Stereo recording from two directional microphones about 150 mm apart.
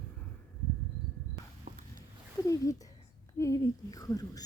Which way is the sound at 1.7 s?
70° right (ahead or behind).